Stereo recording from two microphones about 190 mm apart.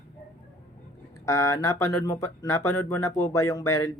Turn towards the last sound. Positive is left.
turn(degrees=15)  # may be behind; listen again after turning